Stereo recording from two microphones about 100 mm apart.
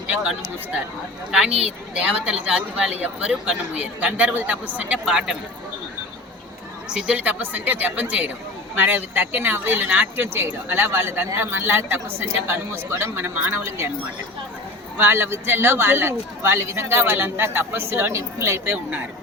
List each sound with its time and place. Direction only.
1.3 s speech: 10° right (ahead or behind)
6.9 s a man's voice: 15° right (ahead or behind)
14.9 s a man's voice: 20° right (ahead or behind)